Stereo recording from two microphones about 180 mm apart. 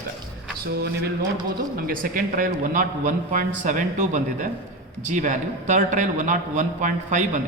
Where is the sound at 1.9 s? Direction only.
50° right (ahead or behind).